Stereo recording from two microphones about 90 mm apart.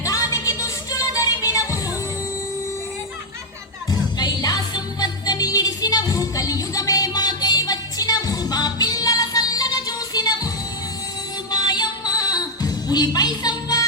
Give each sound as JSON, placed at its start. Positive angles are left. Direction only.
{"t": 0.0, "sound": "music", "side_deg": 40}
{"t": 4.2, "sound": "music", "side_deg": 50}
{"t": 11.5, "sound": "music", "side_deg": 50}